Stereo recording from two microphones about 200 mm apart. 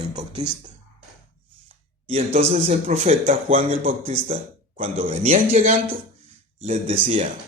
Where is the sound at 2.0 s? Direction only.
30° right (ahead or behind).